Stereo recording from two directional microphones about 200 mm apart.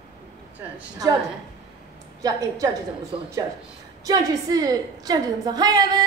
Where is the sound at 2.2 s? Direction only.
15° right (ahead or behind).